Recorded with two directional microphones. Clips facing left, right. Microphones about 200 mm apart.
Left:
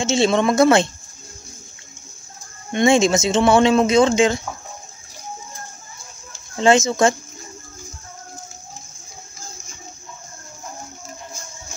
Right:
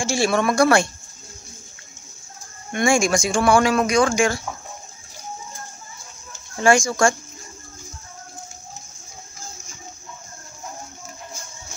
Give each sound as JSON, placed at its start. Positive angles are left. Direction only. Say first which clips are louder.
{"t": 0.0, "sound": "speech", "louder": "left 3 dB", "side_deg": 20}
{"t": 2.7, "sound": "speech", "louder": "left 4 dB", "side_deg": 20}
{"t": 6.5, "sound": "speech", "louder": "left 2 dB", "side_deg": 20}